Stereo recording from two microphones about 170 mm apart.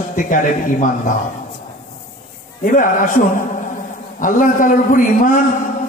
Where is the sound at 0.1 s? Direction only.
50° left (ahead or behind).